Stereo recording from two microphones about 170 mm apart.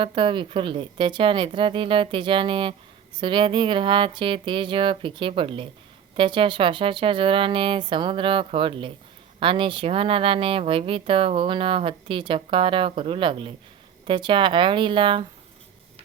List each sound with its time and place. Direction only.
0.0 s speech: 30° right (ahead or behind)